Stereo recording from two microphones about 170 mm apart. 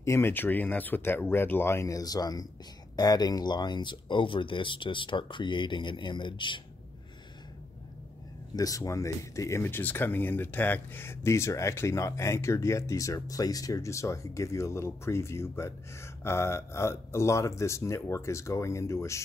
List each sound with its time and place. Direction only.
0.0 s speech: 15° left (ahead or behind)
8.5 s speech: 20° left (ahead or behind)